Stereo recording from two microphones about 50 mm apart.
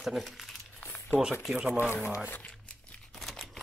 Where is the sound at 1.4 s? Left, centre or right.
Centre.